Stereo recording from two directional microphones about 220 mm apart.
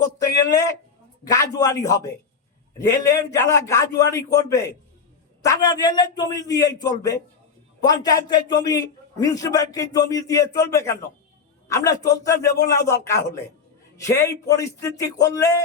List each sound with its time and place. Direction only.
1.3 s a man's voice: 15° left (ahead or behind)